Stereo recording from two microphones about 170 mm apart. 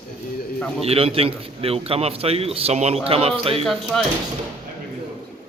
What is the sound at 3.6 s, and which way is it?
Speech, centre (ahead or behind).